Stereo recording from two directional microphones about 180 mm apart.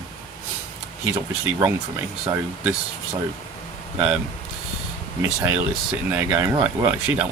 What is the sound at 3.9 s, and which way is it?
Speech, 5° right (ahead or behind).